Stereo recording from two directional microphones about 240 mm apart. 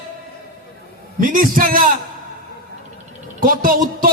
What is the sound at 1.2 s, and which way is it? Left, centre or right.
Speech, right.